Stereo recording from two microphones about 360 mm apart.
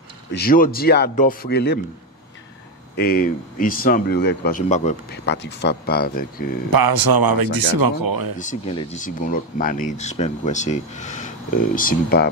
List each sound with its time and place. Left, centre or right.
0.3 s speech: left
3.0 s speech: left
6.7 s speech: right
8.4 s speech: centre